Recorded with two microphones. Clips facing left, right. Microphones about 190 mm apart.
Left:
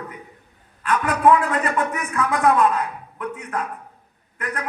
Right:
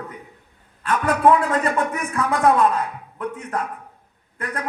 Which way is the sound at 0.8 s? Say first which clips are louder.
Right 1 dB; 30° right (ahead or behind).